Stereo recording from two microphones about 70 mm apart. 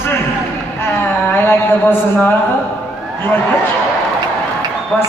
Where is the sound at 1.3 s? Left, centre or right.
Left.